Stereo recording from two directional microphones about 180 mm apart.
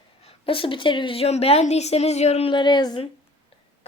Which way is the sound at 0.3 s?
30° left (ahead or behind).